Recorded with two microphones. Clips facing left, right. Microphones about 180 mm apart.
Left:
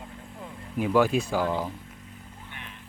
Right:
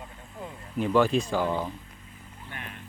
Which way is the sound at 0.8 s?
10° left (ahead or behind).